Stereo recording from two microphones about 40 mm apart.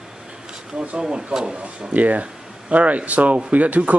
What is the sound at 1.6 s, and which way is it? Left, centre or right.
Speech, right.